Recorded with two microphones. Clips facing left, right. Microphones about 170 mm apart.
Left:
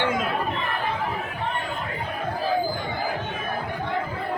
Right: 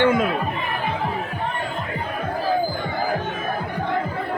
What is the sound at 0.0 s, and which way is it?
Music, 55° right (ahead or behind).